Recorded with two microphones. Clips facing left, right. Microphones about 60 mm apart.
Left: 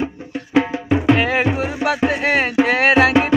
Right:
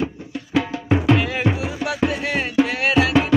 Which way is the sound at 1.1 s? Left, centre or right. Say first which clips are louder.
Left 3 dB; left.